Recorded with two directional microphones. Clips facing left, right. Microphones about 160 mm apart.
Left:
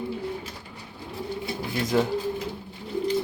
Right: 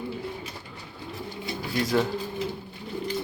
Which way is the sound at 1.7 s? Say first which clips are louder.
Left 1 dB; 20° left (ahead or behind).